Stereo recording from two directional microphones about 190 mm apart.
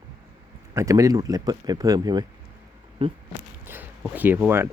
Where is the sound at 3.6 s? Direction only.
10° right (ahead or behind).